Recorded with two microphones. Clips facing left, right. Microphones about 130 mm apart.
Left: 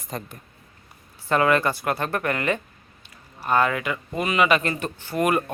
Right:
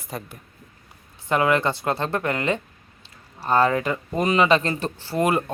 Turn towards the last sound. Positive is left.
turn(degrees=-25)  # may be behind; listen again after turning